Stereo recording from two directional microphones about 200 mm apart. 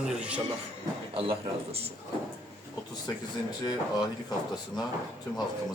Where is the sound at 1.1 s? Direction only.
30° right (ahead or behind).